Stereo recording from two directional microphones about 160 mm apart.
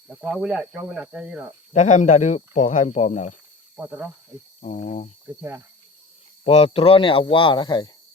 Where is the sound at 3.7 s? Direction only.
10° right (ahead or behind).